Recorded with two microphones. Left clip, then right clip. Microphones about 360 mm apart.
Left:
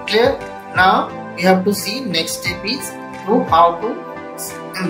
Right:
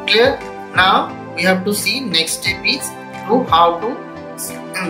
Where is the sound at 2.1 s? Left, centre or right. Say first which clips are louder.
Even; centre.